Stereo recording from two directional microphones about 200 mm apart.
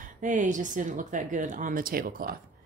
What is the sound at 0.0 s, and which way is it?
Speech, 40° right (ahead or behind).